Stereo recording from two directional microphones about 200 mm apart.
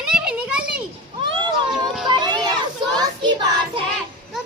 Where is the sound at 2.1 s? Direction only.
20° right (ahead or behind).